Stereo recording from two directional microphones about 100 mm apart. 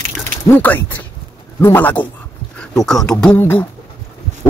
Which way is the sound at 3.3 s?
20° left (ahead or behind).